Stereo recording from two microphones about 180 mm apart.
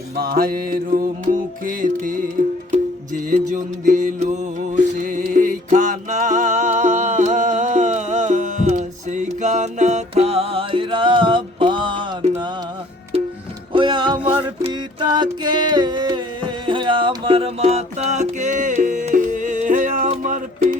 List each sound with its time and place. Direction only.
0.2 s music: 55° right (ahead or behind); by 12.5 s 25° right (ahead or behind)
13.7 s music: 25° right (ahead or behind); by 20.4 s 40° right (ahead or behind)